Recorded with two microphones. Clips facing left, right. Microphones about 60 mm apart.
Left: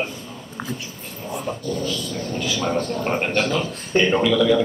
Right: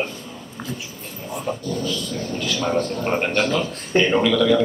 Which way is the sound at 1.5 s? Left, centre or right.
Centre.